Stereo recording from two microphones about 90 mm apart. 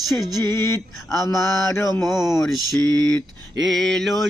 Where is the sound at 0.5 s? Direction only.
30° left (ahead or behind).